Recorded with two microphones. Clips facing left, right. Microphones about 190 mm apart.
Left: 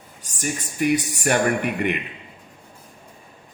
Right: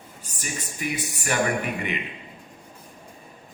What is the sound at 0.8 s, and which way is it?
Speech, 55° left (ahead or behind).